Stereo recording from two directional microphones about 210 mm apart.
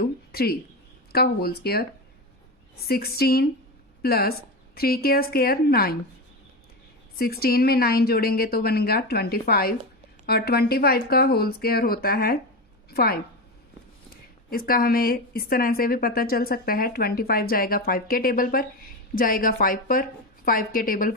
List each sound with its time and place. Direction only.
0.0 s a sound: 45° left (ahead or behind)
1.1 s a woman's voice: 45° left (ahead or behind)
7.2 s a woman's voice: 45° left (ahead or behind)